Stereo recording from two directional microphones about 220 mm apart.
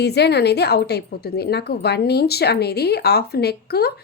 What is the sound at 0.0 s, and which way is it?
Speech, 50° left (ahead or behind).